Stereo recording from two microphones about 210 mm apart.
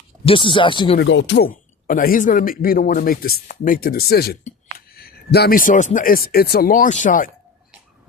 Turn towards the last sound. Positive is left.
turn(degrees=40)  # may be behind; listen again after turning